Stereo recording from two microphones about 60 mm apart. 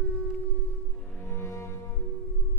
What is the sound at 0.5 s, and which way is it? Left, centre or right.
Music, left.